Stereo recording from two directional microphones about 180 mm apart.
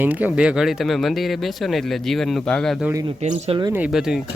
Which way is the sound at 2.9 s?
20° right (ahead or behind).